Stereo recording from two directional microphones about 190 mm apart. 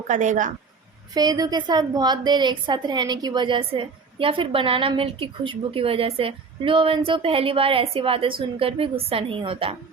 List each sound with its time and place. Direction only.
0.1 s a woman's voice: 40° right (ahead or behind)
1.1 s a woman's voice: 20° right (ahead or behind)